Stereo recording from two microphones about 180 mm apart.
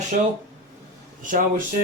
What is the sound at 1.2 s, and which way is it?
Speech, 45° right (ahead or behind).